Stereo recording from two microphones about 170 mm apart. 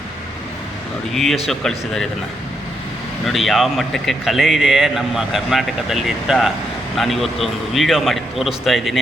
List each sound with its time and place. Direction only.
1.1 s speech: centre (ahead or behind)
3.2 s speech: centre (ahead or behind)